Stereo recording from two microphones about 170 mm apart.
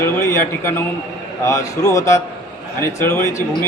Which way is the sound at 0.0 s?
15° left (ahead or behind).